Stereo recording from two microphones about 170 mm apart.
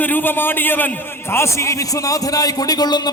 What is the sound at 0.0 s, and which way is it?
A man's voice, 10° left (ahead or behind).